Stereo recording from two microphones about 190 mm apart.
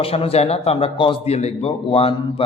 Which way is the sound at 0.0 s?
30° left (ahead or behind).